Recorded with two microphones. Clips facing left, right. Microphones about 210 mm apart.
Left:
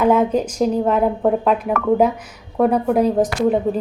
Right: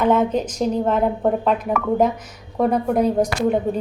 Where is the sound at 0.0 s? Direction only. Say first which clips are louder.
Left 2 dB; 10° left (ahead or behind).